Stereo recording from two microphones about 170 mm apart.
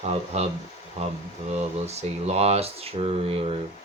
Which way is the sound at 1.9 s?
40° right (ahead or behind).